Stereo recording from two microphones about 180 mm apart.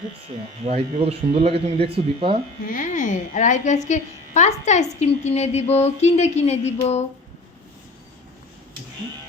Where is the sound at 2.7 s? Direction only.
45° left (ahead or behind).